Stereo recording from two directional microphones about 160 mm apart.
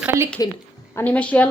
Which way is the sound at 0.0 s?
15° right (ahead or behind).